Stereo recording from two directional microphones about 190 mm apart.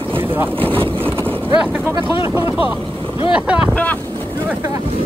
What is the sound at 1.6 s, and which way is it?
Speech, 10° right (ahead or behind).